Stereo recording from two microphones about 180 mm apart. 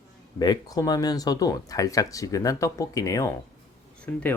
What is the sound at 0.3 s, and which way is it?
Speech, 25° left (ahead or behind).